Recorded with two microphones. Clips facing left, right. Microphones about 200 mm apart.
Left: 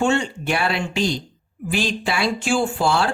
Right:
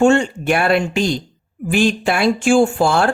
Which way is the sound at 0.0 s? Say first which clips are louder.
Right 7 dB; 50° right (ahead or behind).